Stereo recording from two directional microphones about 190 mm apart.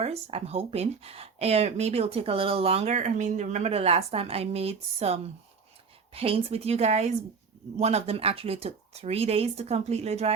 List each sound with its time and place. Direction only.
0.0 s speech: 30° right (ahead or behind)